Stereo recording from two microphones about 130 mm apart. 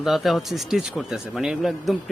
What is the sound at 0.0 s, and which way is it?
Speech, centre (ahead or behind).